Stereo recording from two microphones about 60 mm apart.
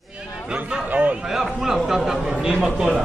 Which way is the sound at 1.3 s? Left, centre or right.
Centre.